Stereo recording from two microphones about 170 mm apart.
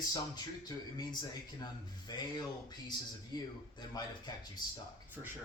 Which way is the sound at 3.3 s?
25° left (ahead or behind).